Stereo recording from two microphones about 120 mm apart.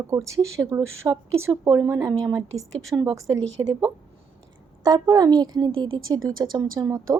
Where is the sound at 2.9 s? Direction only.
20° right (ahead or behind).